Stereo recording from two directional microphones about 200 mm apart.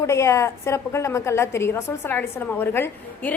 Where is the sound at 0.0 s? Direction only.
15° left (ahead or behind).